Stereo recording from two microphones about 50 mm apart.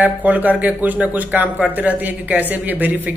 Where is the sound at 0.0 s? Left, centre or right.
Right.